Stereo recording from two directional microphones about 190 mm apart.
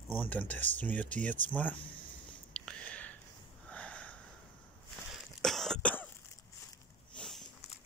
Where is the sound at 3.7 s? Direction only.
5° left (ahead or behind).